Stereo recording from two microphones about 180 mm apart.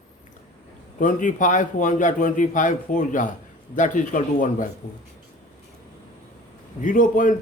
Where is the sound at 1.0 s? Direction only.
45° left (ahead or behind).